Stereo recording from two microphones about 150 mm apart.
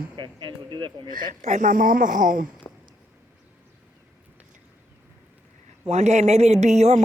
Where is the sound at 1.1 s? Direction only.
60° right (ahead or behind).